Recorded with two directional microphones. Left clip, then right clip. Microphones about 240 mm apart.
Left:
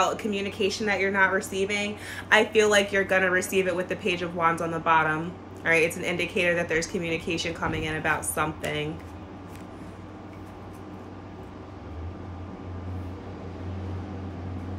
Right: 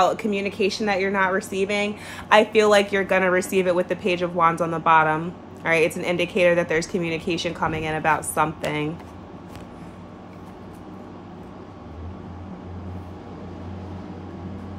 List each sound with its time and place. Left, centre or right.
0.0 s speech: right